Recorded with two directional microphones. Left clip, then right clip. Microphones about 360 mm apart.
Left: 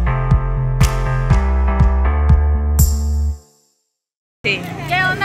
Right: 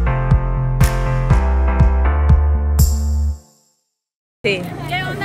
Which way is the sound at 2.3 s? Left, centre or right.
Centre.